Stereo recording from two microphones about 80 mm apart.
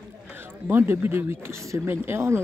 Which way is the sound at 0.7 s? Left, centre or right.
Right.